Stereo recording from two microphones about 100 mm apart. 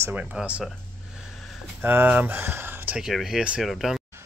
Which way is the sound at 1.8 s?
15° right (ahead or behind).